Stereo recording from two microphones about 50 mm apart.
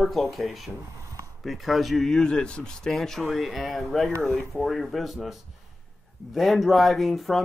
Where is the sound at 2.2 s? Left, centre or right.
Centre.